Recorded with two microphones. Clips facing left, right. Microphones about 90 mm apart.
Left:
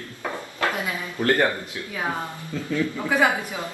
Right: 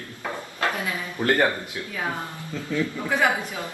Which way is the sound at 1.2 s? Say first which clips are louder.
Even; 15° right (ahead or behind).